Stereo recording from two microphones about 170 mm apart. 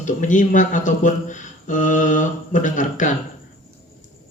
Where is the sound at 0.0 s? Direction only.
45° left (ahead or behind).